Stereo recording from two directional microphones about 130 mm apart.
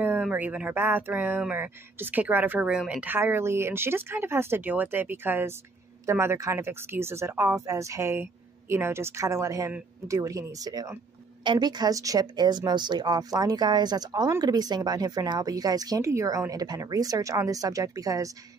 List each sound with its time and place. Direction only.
0.0 s speech: 15° right (ahead or behind)